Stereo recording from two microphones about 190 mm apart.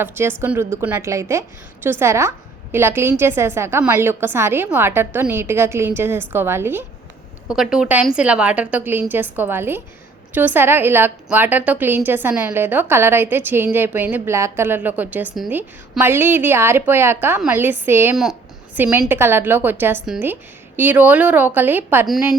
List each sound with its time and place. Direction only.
0.0 s a woman's voice: 10° right (ahead or behind)